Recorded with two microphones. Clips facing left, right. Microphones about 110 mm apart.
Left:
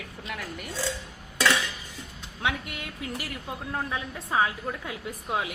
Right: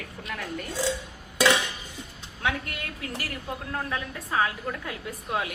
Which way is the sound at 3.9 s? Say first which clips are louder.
Even; 15° left (ahead or behind).